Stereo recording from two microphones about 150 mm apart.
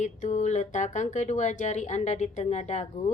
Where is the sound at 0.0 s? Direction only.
50° left (ahead or behind).